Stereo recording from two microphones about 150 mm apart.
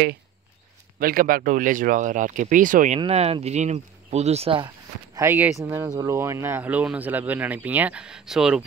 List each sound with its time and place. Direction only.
0.9 s speech: 70° right (ahead or behind)
3.1 s speech: 40° right (ahead or behind)
5.1 s speech: 20° right (ahead or behind)